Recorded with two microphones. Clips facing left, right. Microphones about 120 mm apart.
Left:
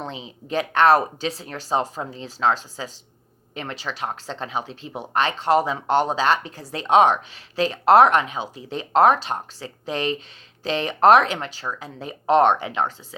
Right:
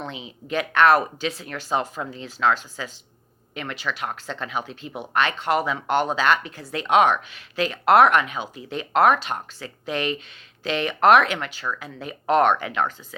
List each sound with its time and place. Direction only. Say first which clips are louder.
0.0 s speech: left 1 dB; 35° left (ahead or behind)